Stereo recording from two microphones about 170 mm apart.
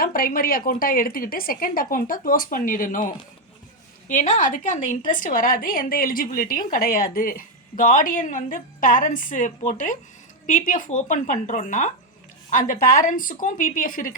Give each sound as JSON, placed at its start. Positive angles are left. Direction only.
{"t": 0.0, "sound": "speech", "side_deg": 55}
{"t": 4.1, "sound": "a woman's voice", "side_deg": 50}